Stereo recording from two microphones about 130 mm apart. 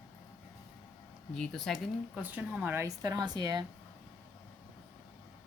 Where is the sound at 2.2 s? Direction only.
10° right (ahead or behind); by 3.7 s 30° right (ahead or behind).